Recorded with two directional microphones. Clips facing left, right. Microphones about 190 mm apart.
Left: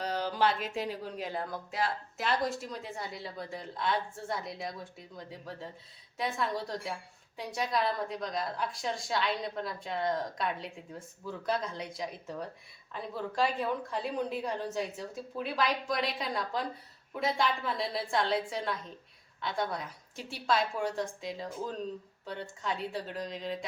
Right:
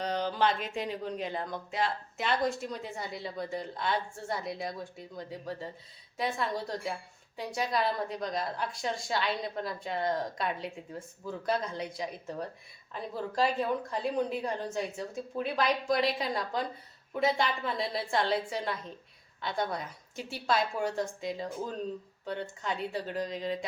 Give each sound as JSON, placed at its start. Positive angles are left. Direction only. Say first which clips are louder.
{"t": 0.0, "sound": "speech", "louder": "right 1 dB", "side_deg": 5}